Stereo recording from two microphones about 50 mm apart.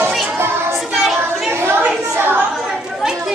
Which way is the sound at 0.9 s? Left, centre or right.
Centre.